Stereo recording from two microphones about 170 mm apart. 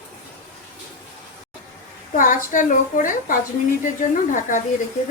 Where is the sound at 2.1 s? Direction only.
50° left (ahead or behind).